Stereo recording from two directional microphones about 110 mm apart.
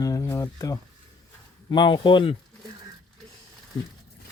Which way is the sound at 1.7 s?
45° left (ahead or behind).